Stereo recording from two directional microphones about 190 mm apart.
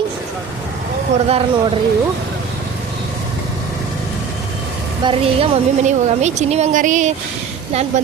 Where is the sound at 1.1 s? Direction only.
35° right (ahead or behind).